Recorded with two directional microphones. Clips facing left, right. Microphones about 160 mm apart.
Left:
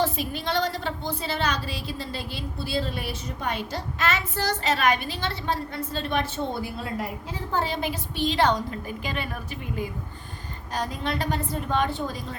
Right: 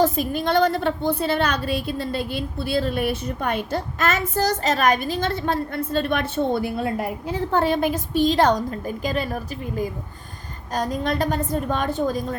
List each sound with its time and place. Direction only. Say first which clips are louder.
0.0 s a woman's voice: right 6 dB; 50° right (ahead or behind)